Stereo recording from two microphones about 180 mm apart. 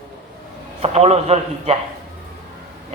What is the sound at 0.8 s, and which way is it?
Speech, 35° right (ahead or behind).